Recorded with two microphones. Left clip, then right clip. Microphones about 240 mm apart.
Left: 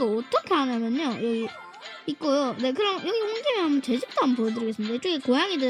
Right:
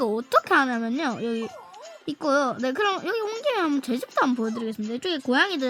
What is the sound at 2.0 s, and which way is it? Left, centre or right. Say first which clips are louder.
A woman's voice: right 2 dB; right.